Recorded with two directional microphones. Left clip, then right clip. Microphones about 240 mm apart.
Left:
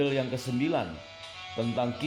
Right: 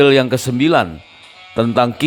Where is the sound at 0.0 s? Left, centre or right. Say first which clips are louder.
Right 17 dB; right.